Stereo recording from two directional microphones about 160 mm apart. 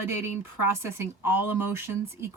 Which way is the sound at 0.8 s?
15° right (ahead or behind).